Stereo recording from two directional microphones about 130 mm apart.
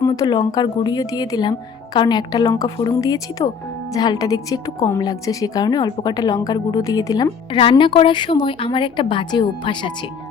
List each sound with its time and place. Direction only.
0.0 s a woman's voice: 25° left (ahead or behind)
7.5 s speech: 40° left (ahead or behind)